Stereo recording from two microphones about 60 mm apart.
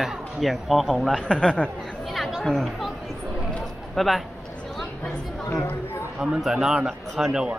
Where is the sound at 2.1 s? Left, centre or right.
Centre.